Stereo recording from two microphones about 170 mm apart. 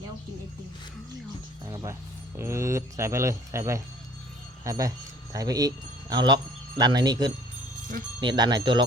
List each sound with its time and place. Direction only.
1.6 s speech: 20° right (ahead or behind)